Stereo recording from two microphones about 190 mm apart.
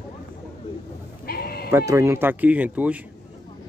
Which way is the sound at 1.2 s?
55° left (ahead or behind).